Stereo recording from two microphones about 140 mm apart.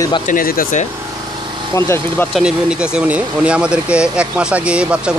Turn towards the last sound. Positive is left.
turn(degrees=-10)  # may be behind; listen again after turning